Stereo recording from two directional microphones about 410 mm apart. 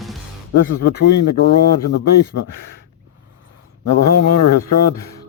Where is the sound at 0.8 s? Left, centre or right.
Left.